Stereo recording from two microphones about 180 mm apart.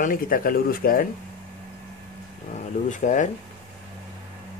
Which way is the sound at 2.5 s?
45° left (ahead or behind).